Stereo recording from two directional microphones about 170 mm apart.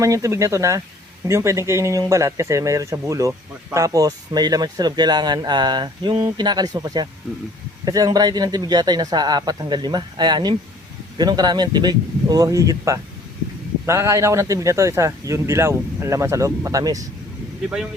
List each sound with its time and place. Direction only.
0.0 s speech: 20° right (ahead or behind)